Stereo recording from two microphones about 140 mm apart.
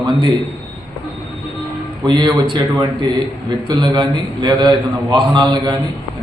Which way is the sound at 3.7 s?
30° right (ahead or behind).